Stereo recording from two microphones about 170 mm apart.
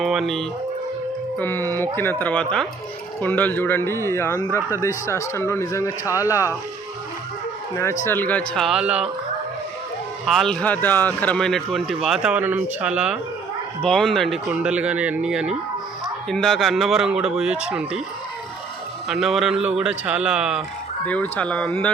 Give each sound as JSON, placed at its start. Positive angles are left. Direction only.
{"t": 0.0, "sound": "speech", "side_deg": 0}
{"t": 1.4, "sound": "speech", "side_deg": 10}
{"t": 8.0, "sound": "speech", "side_deg": 10}
{"t": 10.2, "sound": "speech", "side_deg": 0}
{"t": 19.0, "sound": "speech", "side_deg": 0}
{"t": 21.1, "sound": "speech", "side_deg": 10}